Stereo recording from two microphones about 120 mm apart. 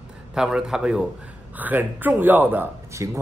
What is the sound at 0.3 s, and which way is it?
Speech, 5° right (ahead or behind).